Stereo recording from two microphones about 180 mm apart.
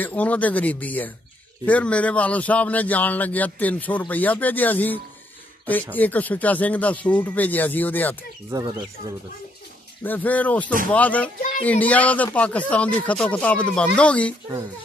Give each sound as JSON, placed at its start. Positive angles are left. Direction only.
{"t": 0.0, "sound": "a man's voice", "side_deg": 10}
{"t": 8.5, "sound": "speech", "side_deg": -20}
{"t": 10.0, "sound": "a man's voice", "side_deg": 10}